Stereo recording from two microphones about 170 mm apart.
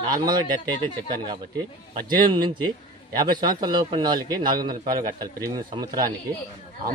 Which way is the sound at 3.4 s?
25° right (ahead or behind).